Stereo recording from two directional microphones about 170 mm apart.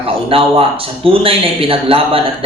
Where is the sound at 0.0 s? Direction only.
35° right (ahead or behind).